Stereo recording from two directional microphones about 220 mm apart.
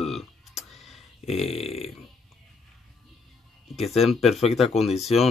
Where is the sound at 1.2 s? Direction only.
30° left (ahead or behind).